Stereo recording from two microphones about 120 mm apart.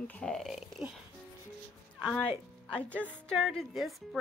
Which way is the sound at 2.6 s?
10° left (ahead or behind).